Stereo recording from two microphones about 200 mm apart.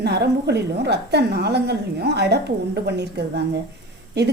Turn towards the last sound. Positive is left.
turn(degrees=-55)  # may be behind; listen again after turning